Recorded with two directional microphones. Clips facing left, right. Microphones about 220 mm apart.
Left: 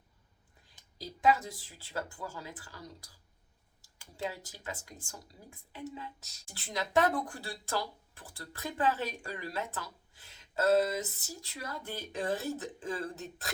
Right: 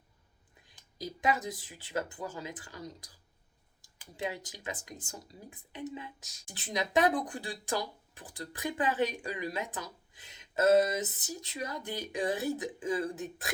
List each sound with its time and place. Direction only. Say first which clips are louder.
0.9 s speech: left 3 dB; 20° right (ahead or behind)